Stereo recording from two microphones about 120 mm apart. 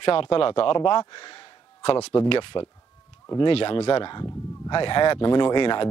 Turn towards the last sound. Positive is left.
turn(degrees=40)  # may be behind; listen again after turning